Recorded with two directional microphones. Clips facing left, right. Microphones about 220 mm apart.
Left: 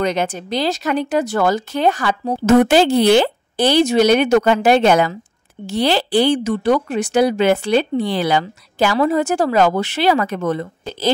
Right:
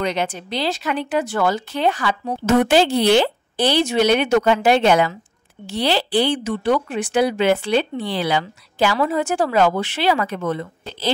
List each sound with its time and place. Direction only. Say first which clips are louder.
0.0 s speech: left 3 dB; 45° left (ahead or behind)